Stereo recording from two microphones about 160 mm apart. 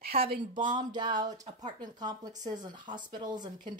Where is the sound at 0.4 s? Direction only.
30° right (ahead or behind).